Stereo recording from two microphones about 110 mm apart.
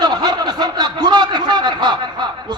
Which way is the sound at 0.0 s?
40° right (ahead or behind).